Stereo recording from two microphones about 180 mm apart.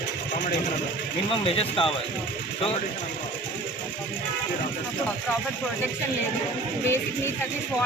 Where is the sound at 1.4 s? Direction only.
30° left (ahead or behind).